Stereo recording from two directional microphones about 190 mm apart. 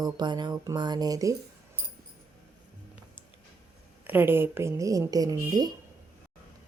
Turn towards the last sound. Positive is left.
turn(degrees=-20)  # may be behind; listen again after turning